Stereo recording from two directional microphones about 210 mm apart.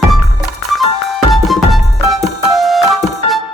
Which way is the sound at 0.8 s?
Centre (ahead or behind).